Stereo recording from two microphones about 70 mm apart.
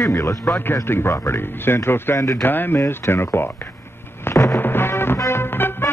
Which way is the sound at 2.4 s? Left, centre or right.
Left.